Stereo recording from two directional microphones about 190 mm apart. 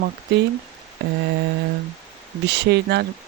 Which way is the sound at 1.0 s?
65° right (ahead or behind).